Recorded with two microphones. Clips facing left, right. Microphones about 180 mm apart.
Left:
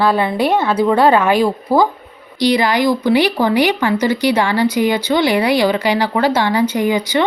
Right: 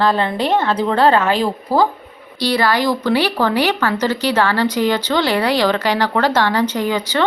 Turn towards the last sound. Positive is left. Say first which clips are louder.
# left 3 dB
turn(degrees=15)  # may be behind; listen again after turning